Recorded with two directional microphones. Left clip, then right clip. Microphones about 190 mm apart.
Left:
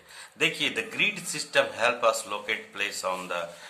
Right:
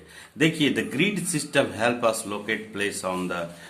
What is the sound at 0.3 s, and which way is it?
A man's voice, 15° right (ahead or behind).